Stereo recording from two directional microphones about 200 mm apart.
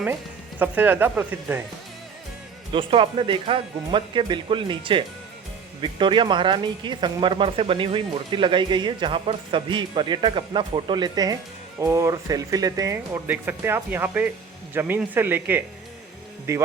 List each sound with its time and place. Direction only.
0.6 s speech: 10° right (ahead or behind)
2.7 s speech: 25° right (ahead or behind)